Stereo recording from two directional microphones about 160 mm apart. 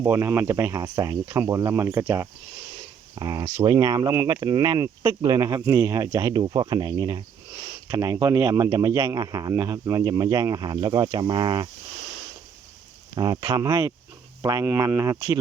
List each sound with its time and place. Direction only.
0.0 s speech: 15° right (ahead or behind)
13.1 s speech: 25° right (ahead or behind)